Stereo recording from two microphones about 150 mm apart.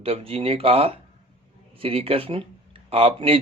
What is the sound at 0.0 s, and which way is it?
Speech, 40° right (ahead or behind).